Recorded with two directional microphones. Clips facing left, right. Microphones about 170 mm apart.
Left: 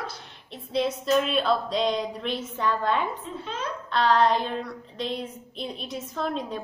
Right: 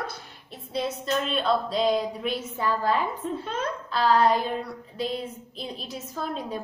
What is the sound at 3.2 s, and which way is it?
Speech, 50° right (ahead or behind).